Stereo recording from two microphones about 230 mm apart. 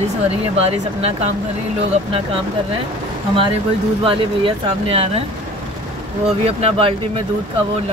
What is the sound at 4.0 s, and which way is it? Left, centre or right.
Speech, right.